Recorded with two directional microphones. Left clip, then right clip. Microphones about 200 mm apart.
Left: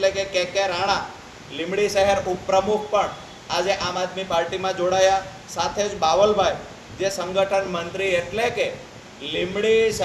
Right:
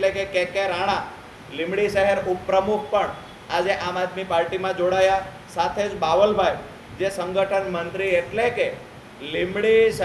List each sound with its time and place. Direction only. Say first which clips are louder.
0.0 s a man's voice: even; 5° right (ahead or behind)